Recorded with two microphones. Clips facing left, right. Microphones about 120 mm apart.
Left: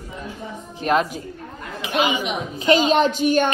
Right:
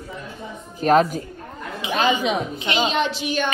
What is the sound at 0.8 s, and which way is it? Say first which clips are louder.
Speech: right 4 dB; 40° right (ahead or behind).